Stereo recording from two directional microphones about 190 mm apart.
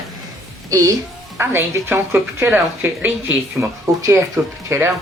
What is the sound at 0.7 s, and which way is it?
A woman's voice, 15° right (ahead or behind).